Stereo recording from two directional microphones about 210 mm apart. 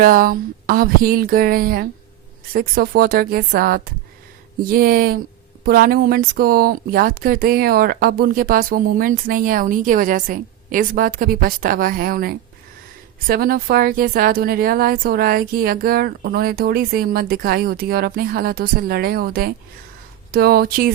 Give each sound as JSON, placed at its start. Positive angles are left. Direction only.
{"t": 0.0, "sound": "speech", "side_deg": -40}